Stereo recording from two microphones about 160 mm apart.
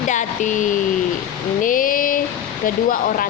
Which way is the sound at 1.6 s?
60° left (ahead or behind).